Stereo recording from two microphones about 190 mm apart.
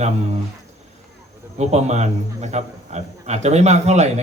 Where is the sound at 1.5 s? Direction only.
35° right (ahead or behind).